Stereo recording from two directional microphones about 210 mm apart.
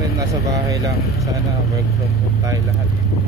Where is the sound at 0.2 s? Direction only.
15° right (ahead or behind).